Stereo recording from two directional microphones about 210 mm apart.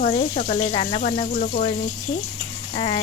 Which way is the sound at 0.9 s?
40° left (ahead or behind).